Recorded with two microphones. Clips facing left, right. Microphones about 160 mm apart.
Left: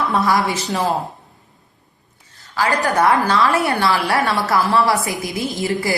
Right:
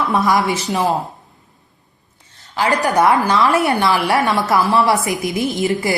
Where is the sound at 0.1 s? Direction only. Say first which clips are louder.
Right 3 dB; 20° right (ahead or behind).